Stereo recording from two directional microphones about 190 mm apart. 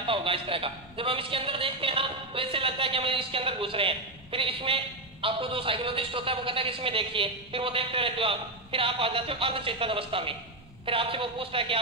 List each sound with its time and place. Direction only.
0.0 s a man's voice: 30° right (ahead or behind)